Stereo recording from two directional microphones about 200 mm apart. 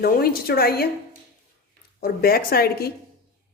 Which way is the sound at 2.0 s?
45° left (ahead or behind).